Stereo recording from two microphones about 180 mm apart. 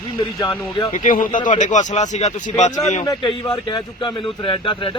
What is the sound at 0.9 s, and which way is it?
A man's voice, 45° left (ahead or behind).